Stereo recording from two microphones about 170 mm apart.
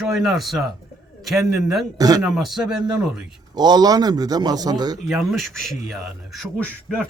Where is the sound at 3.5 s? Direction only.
25° right (ahead or behind).